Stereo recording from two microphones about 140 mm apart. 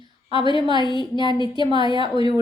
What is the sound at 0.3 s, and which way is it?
Speech, 35° right (ahead or behind).